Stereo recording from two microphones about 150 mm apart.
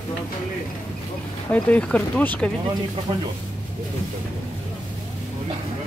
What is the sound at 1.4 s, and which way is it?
Speech, 10° left (ahead or behind).